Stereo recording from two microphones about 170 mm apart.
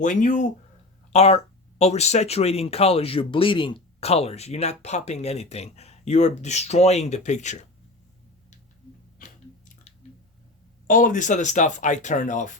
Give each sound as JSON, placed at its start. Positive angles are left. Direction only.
{"t": 0.0, "sound": "speech", "side_deg": 50}
{"t": 1.1, "sound": "speech", "side_deg": 35}
{"t": 9.1, "sound": "chewing", "side_deg": 50}
{"t": 10.8, "sound": "speech", "side_deg": 50}